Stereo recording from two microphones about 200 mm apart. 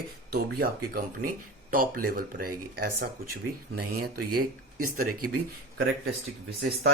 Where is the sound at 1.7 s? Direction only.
45° right (ahead or behind).